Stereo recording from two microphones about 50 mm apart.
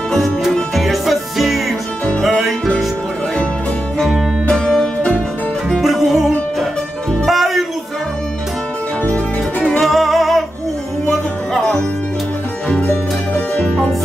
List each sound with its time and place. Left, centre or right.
0.7 s music: centre
4.5 s music: centre
5.7 s music: centre
9.0 s music: left
9.8 s music: centre
12.6 s music: left